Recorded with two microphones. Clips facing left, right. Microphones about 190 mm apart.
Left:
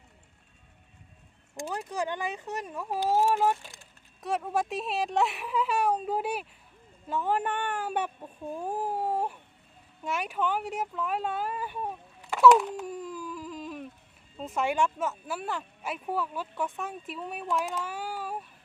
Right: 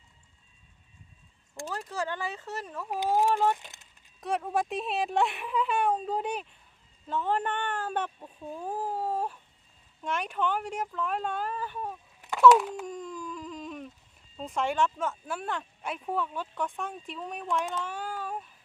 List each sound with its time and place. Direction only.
1.5 s speech: 20° left (ahead or behind)
3.6 s speech: 20° right (ahead or behind)
4.2 s speech: centre (ahead or behind)
12.5 s a sound: centre (ahead or behind)
14.3 s speech: 5° left (ahead or behind)